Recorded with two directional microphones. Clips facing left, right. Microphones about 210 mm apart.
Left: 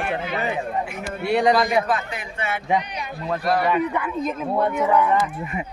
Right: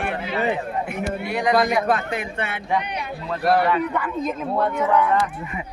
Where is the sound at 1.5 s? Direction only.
55° right (ahead or behind).